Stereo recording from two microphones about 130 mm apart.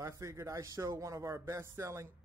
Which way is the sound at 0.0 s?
25° right (ahead or behind).